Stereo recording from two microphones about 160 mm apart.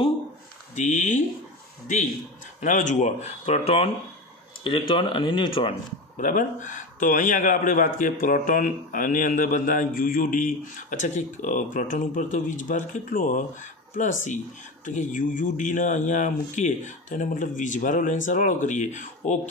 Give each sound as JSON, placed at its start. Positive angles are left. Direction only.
{"t": 0.7, "sound": "speech", "side_deg": 50}
{"t": 2.6, "sound": "speech", "side_deg": 50}
{"t": 6.1, "sound": "speech", "side_deg": 50}